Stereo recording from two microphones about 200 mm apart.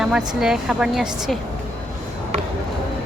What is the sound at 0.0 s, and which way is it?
Speech, 5° right (ahead or behind).